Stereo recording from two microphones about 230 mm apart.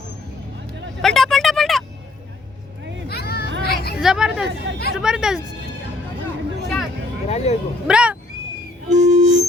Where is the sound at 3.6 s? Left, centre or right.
Left.